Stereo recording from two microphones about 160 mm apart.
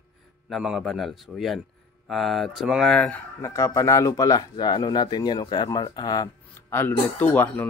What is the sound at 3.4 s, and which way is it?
Speech, 20° left (ahead or behind).